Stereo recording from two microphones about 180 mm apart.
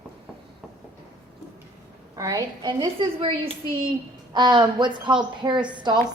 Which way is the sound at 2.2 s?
20° right (ahead or behind).